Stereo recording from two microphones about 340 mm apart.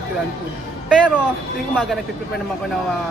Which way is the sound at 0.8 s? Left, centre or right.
Centre.